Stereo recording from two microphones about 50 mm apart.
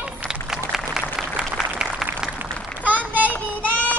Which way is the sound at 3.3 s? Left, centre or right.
Left.